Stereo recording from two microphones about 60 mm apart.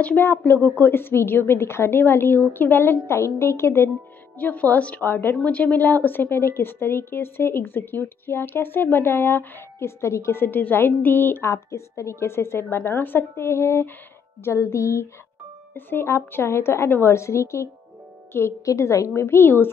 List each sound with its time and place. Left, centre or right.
0.7 s a woman's voice: left
4.4 s a woman's voice: left
11.4 s a woman's voice: left
15.7 s a woman's voice: left
18.3 s a woman's voice: left
18.7 s a woman's voice: left
19.1 s a woman's voice: left